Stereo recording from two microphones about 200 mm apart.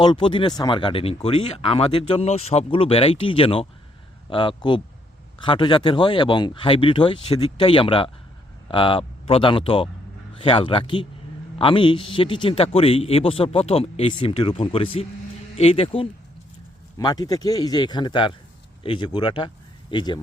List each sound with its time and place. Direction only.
0.0 s speech: 25° left (ahead or behind)